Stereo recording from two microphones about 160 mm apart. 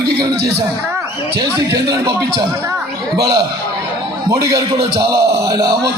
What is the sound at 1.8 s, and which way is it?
Speech, 25° right (ahead or behind).